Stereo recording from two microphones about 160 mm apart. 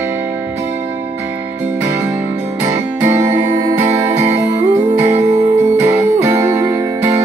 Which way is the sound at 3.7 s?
45° right (ahead or behind).